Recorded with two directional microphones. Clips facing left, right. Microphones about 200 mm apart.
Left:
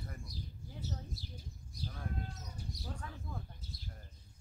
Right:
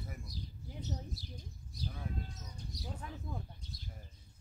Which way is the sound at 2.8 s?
15° right (ahead or behind).